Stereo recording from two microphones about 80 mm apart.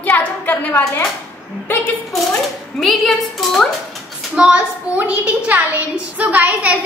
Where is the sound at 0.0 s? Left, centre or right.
Left.